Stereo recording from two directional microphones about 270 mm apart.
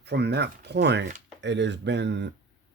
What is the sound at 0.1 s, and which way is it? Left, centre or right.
Speech, right.